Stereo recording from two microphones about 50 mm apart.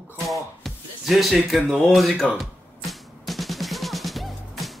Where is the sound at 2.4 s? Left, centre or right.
Centre.